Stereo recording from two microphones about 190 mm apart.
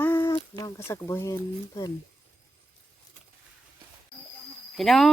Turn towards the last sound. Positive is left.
turn(degrees=0)  # may be behind; listen again after turning